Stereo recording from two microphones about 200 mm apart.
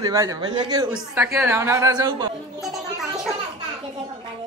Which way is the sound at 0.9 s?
10° right (ahead or behind).